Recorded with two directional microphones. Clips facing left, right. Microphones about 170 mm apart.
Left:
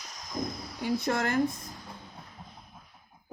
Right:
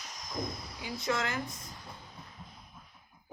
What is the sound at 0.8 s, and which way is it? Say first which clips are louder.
Speech: left 5 dB; 60° left (ahead or behind).